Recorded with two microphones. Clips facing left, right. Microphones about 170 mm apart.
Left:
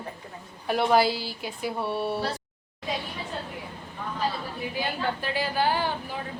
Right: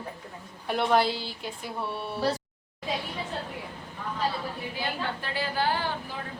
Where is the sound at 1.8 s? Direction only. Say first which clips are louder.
Left 5 dB; 30° left (ahead or behind).